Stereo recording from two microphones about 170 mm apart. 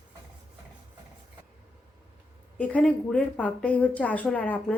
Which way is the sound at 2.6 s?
10° left (ahead or behind).